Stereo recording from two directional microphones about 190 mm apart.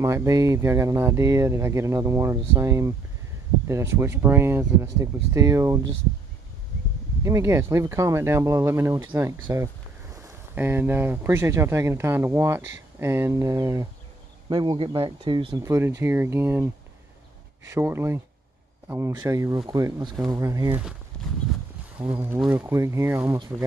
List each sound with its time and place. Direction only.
0.0 s speech: 15° right (ahead or behind)
7.2 s speech: 15° right (ahead or behind)
22.1 s speech: 10° right (ahead or behind)